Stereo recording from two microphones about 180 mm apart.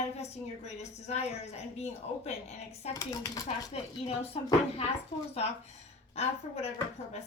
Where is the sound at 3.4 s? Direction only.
35° left (ahead or behind).